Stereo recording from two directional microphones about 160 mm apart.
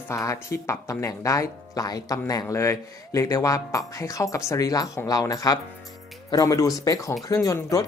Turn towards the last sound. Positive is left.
turn(degrees=20)  # may be behind; listen again after turning